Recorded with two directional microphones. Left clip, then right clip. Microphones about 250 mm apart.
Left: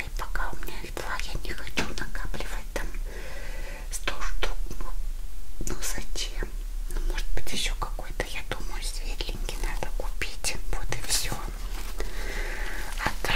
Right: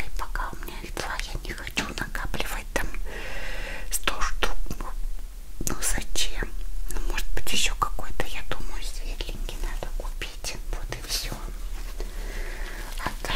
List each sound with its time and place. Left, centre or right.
0.0 s whispering: centre
2.0 s whispering: right; by 11.3 s centre
12.4 s a sound: centre